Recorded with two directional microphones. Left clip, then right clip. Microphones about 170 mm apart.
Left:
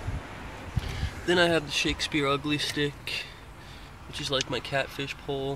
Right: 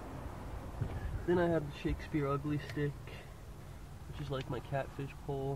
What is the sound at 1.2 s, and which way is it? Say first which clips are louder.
Speech: left 9 dB; 25° left (ahead or behind).